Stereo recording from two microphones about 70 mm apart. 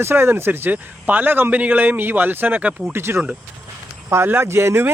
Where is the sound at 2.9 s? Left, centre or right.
Right.